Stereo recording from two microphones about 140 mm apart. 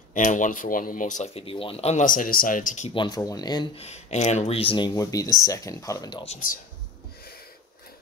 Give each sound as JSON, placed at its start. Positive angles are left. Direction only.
{"t": 0.1, "sound": "speech", "side_deg": 65}
{"t": 1.3, "sound": "speech", "side_deg": 40}
{"t": 2.0, "sound": "speech", "side_deg": 85}
{"t": 2.9, "sound": "speech", "side_deg": 35}
{"t": 3.7, "sound": "speech", "side_deg": 50}